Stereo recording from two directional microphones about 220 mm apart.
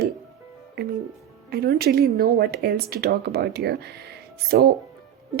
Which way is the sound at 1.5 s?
45° right (ahead or behind).